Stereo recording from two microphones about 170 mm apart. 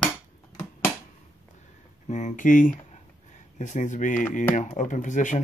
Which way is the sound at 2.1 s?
45° left (ahead or behind).